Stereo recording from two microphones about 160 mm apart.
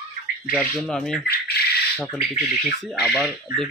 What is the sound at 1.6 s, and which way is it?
Squawk, 80° left.